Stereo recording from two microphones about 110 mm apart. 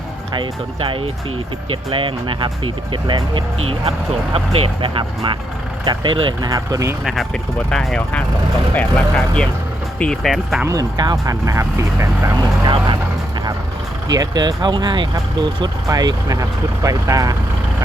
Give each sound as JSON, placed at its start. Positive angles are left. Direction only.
{"t": 0.3, "sound": "speech", "side_deg": -50}
{"t": 6.4, "sound": "speech", "side_deg": -30}
{"t": 7.0, "sound": "speech", "side_deg": 0}
{"t": 10.7, "sound": "speech", "side_deg": -35}
{"t": 12.4, "sound": "speech", "side_deg": -40}
{"t": 14.1, "sound": "speech", "side_deg": -40}